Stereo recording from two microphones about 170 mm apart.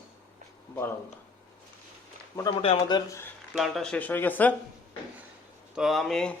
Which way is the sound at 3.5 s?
Centre (ahead or behind).